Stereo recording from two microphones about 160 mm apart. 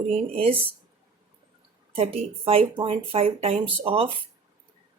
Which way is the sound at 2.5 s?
35° right (ahead or behind).